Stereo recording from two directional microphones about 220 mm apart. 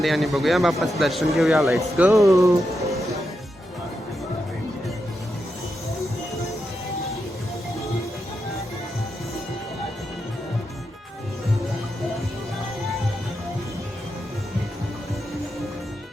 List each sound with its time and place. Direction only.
0.0 s a man's voice: centre (ahead or behind)
2.0 s speech: 15° right (ahead or behind)